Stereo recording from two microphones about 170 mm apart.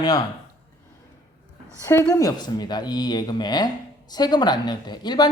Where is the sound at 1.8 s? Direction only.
15° left (ahead or behind).